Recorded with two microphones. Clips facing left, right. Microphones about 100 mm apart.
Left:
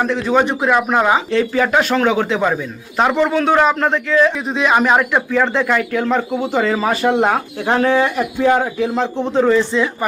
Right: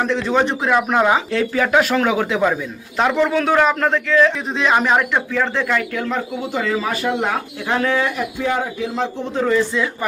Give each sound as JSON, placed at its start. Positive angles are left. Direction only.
{"t": 0.0, "sound": "a man's voice", "side_deg": 10}
{"t": 6.1, "sound": "speech", "side_deg": 65}
{"t": 7.0, "sound": "speech", "side_deg": 45}
{"t": 7.6, "sound": "speech", "side_deg": 35}
{"t": 8.4, "sound": "speech", "side_deg": 60}
{"t": 9.1, "sound": "speech", "side_deg": 30}